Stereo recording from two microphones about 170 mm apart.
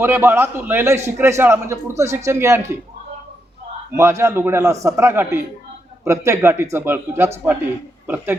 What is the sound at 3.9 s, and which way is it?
A man's voice, 15° right (ahead or behind).